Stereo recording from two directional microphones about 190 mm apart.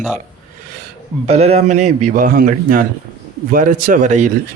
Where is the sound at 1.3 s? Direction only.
35° right (ahead or behind).